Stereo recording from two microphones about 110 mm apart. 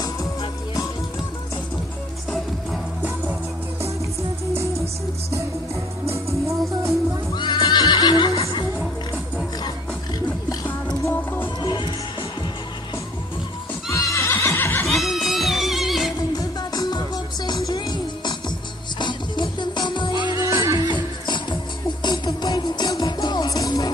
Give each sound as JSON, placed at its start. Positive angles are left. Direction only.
{"t": 0.0, "sound": "music", "side_deg": 35}
{"t": 6.1, "sound": "music", "side_deg": -25}
{"t": 7.3, "sound": "neigh", "side_deg": 40}
{"t": 10.5, "sound": "a sound", "side_deg": 30}
{"t": 11.1, "sound": "music", "side_deg": 15}
{"t": 11.6, "sound": "music", "side_deg": 45}
{"t": 13.8, "sound": "neigh", "side_deg": 30}
{"t": 14.9, "sound": "music", "side_deg": 0}
{"t": 16.2, "sound": "music", "side_deg": 35}
{"t": 20.6, "sound": "music", "side_deg": -30}
{"t": 20.9, "sound": "music", "side_deg": 45}